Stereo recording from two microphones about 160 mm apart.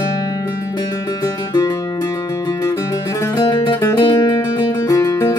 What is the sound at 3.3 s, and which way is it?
Music, 30° left (ahead or behind).